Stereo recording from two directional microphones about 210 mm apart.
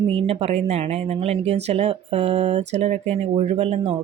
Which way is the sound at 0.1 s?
25° right (ahead or behind).